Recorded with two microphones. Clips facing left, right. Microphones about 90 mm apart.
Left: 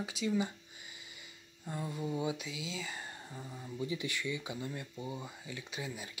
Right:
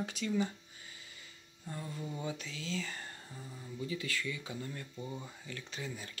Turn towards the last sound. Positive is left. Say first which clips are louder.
# left 1 dB
turn(degrees=10)  # may be behind; listen again after turning